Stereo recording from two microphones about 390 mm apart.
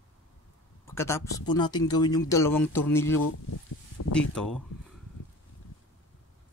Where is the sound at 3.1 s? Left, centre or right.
Left.